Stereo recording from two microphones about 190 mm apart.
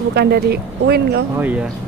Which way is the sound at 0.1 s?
60° right (ahead or behind).